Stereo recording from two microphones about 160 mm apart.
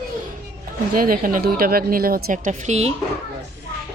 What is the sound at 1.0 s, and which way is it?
A woman's voice, 60° right (ahead or behind).